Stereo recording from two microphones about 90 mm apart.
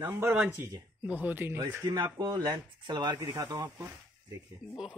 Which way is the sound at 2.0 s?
45° right (ahead or behind).